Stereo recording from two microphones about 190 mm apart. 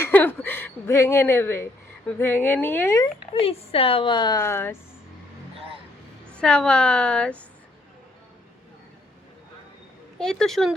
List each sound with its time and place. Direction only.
0.0 s a sound: 10° left (ahead or behind)
2.0 s a woman's voice: 10° left (ahead or behind)
3.3 s a woman's voice: 30° left (ahead or behind); by 4.8 s 15° left (ahead or behind)
6.3 s a woman's voice: 5° left (ahead or behind)
10.2 s a woman's voice: 5° left (ahead or behind)